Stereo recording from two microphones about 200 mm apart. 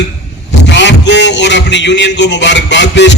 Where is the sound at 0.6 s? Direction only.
60° left (ahead or behind).